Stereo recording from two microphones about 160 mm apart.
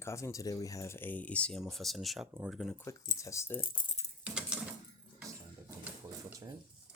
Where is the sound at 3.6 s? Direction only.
55° left (ahead or behind).